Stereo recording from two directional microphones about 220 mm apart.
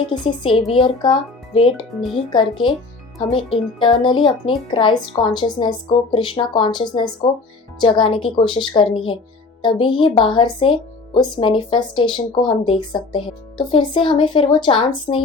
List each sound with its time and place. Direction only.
0.1 s speech: 20° left (ahead or behind)